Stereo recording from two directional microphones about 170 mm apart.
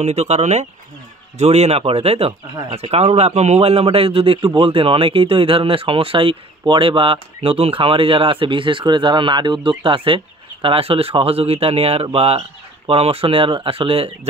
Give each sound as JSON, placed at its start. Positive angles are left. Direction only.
{"t": 0.0, "sound": "speech", "side_deg": -40}